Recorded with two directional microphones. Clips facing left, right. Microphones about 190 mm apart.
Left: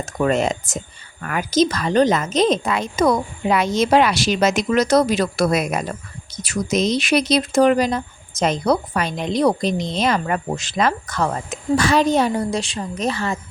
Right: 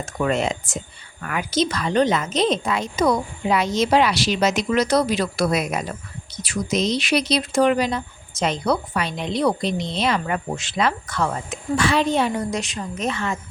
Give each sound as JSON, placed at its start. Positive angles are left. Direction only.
{"t": 0.0, "sound": "a woman's voice", "side_deg": 40}